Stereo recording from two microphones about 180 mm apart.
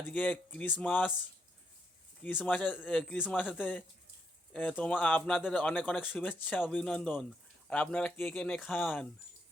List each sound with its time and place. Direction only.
0.0 s speech: 10° left (ahead or behind)
2.2 s speech: 10° left (ahead or behind)